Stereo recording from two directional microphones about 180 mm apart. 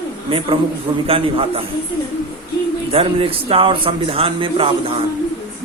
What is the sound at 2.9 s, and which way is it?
A man's voice, 30° right (ahead or behind).